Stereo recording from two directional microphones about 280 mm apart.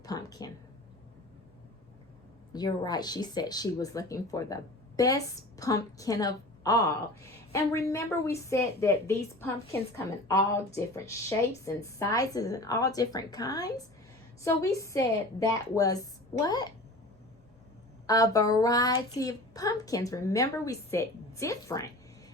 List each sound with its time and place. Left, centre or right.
0.0 s a sound: centre
2.5 s speech: centre
18.0 s speech: centre